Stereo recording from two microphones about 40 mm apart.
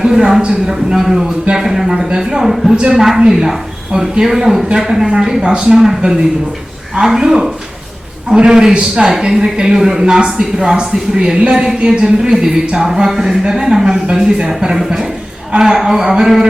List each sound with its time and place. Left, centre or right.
0.0 s speech: centre
5.4 s a man's voice: right
5.7 s a man's voice: centre
11.5 s speech: centre